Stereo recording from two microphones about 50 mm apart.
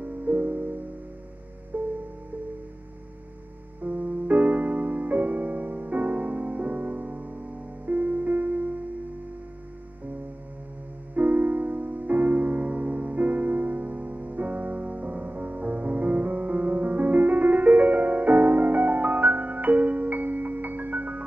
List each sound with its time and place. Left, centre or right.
0.0 s music: right
3.8 s music: right
11.1 s music: right